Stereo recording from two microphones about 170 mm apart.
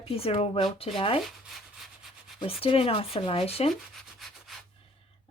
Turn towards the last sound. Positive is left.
turn(degrees=0)  # may be behind; listen again after turning